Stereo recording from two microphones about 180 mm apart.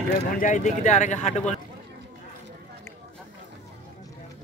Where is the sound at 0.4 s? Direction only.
45° left (ahead or behind).